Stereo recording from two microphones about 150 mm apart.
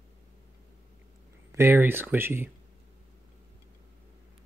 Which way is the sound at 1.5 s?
15° right (ahead or behind).